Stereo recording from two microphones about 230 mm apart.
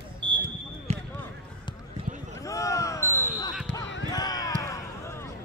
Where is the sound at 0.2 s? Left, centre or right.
Right.